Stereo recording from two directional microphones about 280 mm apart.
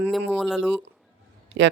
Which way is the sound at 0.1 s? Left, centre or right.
Centre.